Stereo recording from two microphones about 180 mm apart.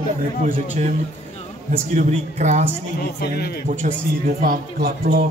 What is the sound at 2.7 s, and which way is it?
Speech, 60° left (ahead or behind).